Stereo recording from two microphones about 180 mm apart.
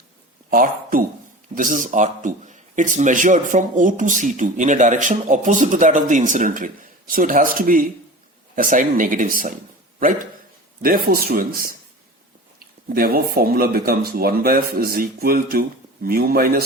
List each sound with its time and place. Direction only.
0.5 s speech: 50° right (ahead or behind)
10.8 s speech: 50° right (ahead or behind)